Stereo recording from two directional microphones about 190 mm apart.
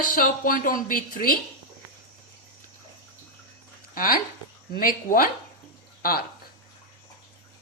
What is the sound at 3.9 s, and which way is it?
Speech, 50° left (ahead or behind).